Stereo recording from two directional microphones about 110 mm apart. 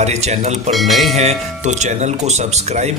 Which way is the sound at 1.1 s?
90° right.